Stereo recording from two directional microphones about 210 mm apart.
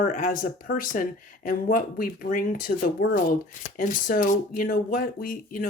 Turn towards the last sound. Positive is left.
turn(degrees=40)  # may be behind; listen again after turning